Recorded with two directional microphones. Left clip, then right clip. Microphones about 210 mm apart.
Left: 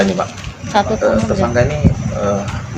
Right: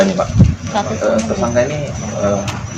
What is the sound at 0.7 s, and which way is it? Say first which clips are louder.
Speech: left 4 dB; 55° left (ahead or behind).